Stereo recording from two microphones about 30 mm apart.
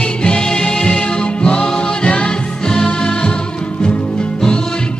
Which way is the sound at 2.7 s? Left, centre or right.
Left.